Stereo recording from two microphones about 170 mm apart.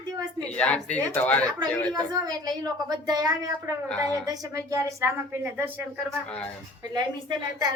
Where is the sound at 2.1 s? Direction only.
25° right (ahead or behind).